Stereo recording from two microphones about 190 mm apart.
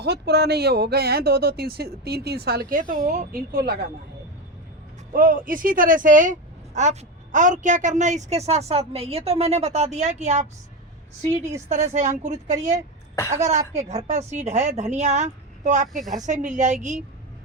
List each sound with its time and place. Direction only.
0.0 s speech: 60° right (ahead or behind)
5.1 s a woman's voice: 45° right (ahead or behind)
11.7 s a woman's voice: 40° right (ahead or behind)